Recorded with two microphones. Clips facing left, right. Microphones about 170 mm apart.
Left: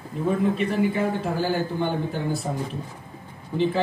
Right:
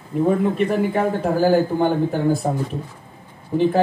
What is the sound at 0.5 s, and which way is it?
Speech, 55° right (ahead or behind).